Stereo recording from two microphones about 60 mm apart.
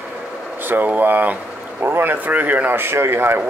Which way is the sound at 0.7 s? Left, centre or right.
Right.